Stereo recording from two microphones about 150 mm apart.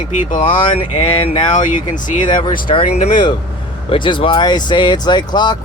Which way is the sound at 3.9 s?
35° left (ahead or behind).